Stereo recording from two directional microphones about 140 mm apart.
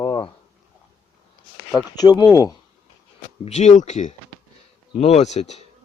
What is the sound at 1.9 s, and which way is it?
Speech, 30° left (ahead or behind).